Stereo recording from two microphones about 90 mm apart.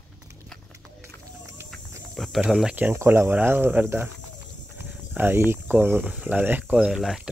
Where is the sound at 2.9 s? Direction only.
30° right (ahead or behind).